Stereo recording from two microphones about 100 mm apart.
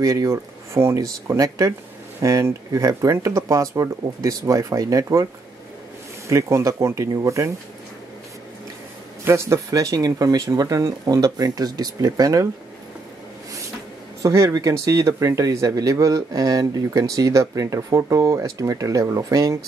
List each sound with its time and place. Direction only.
0.0 s speech: 35° right (ahead or behind)
9.2 s speech: 30° right (ahead or behind)
14.2 s speech: 35° right (ahead or behind)